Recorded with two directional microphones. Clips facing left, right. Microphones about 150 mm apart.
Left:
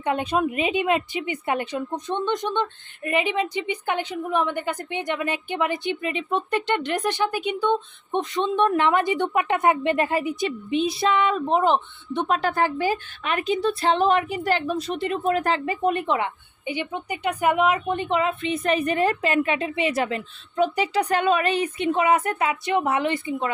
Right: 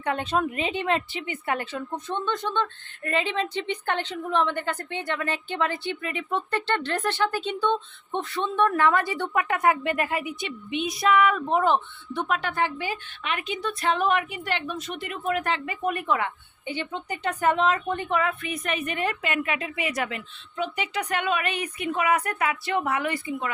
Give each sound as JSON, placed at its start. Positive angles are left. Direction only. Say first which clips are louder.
{"t": 0.0, "sound": "a woman's voice", "louder": "left 3 dB", "side_deg": 15}
{"t": 12.4, "sound": "a woman's voice", "louder": "left 5 dB", "side_deg": 35}